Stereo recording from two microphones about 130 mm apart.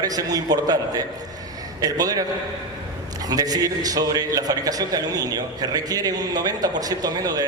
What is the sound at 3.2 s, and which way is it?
A man's voice, 30° right (ahead or behind).